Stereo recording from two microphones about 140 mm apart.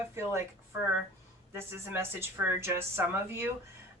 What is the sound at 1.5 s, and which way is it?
Speech, 15° right (ahead or behind).